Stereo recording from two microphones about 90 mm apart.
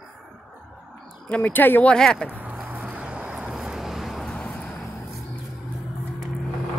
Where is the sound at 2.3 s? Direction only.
20° right (ahead or behind); by 4.5 s 5° left (ahead or behind).